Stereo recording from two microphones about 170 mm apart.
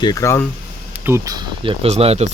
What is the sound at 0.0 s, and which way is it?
Speech, 20° left (ahead or behind).